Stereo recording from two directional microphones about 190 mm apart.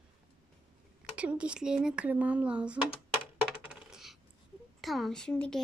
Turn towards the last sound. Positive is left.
turn(degrees=5)  # may be behind; listen again after turning